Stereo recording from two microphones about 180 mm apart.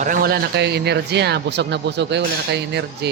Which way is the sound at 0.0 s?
50° right (ahead or behind).